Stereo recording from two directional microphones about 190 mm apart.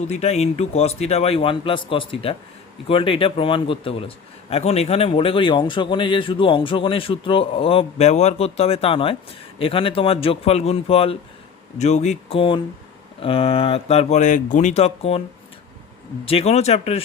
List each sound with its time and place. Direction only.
0.1 s a man's voice: 35° left (ahead or behind)
16.2 s a man's voice: 30° left (ahead or behind)